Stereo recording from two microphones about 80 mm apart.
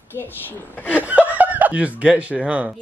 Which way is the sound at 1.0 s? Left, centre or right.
Centre.